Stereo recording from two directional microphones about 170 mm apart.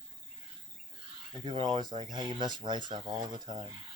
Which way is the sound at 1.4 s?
25° right (ahead or behind).